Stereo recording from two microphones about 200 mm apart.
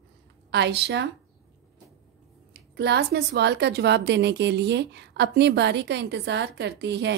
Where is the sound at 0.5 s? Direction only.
60° right (ahead or behind).